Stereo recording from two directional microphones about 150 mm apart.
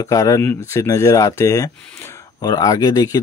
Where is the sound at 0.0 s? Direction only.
20° left (ahead or behind).